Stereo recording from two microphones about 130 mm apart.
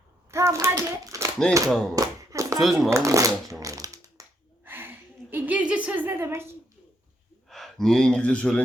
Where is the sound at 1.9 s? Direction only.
25° right (ahead or behind).